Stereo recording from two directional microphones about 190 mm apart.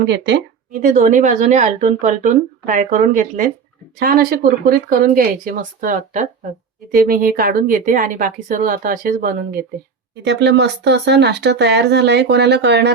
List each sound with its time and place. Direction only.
0.0 s speech: 65° right (ahead or behind)
0.8 s speech: 40° right (ahead or behind)
10.2 s speech: 65° right (ahead or behind)